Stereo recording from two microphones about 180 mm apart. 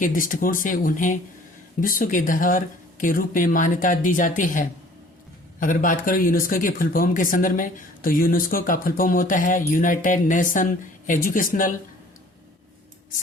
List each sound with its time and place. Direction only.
0.0 s speech: 50° left (ahead or behind)